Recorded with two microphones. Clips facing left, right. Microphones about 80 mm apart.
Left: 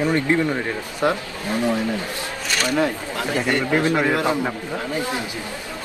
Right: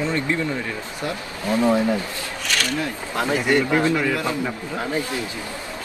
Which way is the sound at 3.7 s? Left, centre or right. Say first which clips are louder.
Left 1 dB; left.